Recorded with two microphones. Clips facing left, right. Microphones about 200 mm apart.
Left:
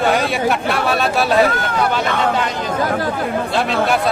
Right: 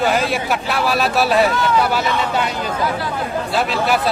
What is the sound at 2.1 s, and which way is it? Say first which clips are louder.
Speech: left 2 dB; 55° left (ahead or behind).